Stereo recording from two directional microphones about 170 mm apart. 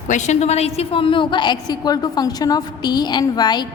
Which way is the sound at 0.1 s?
45° left (ahead or behind).